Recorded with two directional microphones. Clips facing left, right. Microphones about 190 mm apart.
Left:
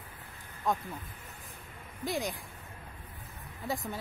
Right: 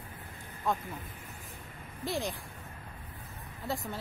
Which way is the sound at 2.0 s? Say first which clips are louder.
Even; 15° left (ahead or behind).